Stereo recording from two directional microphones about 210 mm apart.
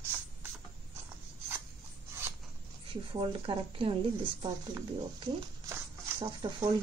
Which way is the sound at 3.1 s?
25° right (ahead or behind).